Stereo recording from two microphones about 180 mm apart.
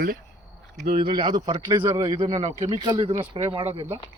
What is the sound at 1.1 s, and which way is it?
Speech, 25° right (ahead or behind).